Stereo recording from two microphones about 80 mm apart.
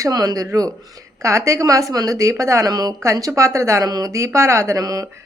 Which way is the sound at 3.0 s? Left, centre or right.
Right.